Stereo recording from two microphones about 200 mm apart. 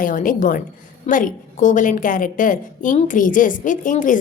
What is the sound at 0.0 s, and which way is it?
A woman's voice, 45° left (ahead or behind).